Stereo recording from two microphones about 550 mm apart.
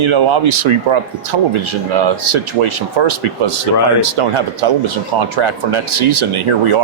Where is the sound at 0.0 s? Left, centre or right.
Right.